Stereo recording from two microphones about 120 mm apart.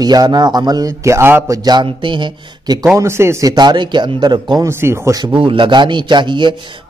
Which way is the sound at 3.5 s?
35° right (ahead or behind).